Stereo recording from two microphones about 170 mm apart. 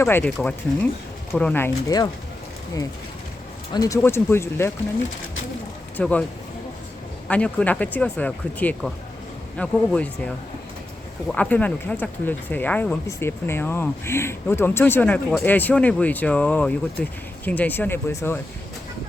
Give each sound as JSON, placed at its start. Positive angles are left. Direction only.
{"t": 0.0, "sound": "speech", "side_deg": 10}
{"t": 3.7, "sound": "speech", "side_deg": 20}
{"t": 6.0, "sound": "speech", "side_deg": 10}
{"t": 7.3, "sound": "speech", "side_deg": 5}